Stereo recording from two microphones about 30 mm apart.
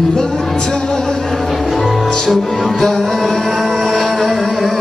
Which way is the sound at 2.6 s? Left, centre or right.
Centre.